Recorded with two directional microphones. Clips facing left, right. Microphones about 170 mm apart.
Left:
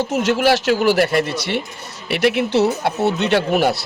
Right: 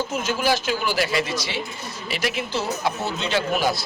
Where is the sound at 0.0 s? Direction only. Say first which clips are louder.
Left 7 dB; 75° left (ahead or behind).